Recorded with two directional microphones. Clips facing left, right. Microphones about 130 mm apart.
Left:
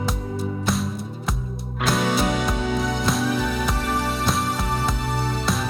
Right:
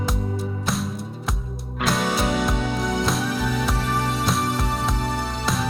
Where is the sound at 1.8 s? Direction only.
Centre (ahead or behind).